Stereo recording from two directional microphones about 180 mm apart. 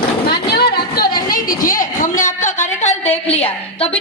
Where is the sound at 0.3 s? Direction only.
60° left (ahead or behind); by 3.1 s 40° left (ahead or behind).